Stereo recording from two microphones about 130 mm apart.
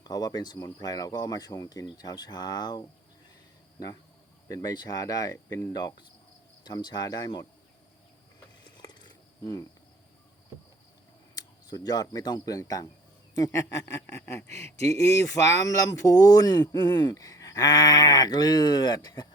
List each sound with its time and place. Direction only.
0.0 s speech: 30° left (ahead or behind)
4.4 s speech: 30° left (ahead or behind)
8.8 s insect: 35° left (ahead or behind)
11.3 s speech: 30° left (ahead or behind)